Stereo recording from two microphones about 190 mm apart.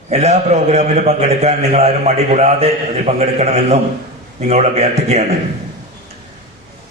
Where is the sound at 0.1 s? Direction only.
35° right (ahead or behind).